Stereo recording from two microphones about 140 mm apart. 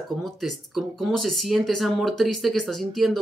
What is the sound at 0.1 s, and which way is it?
Speech, centre (ahead or behind).